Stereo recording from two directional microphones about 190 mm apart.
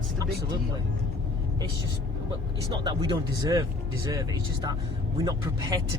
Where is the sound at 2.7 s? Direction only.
20° right (ahead or behind).